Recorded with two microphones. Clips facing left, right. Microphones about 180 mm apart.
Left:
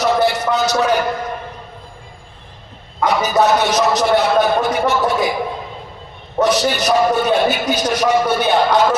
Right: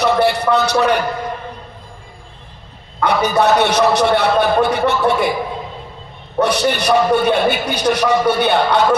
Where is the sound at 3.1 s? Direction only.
60° right (ahead or behind).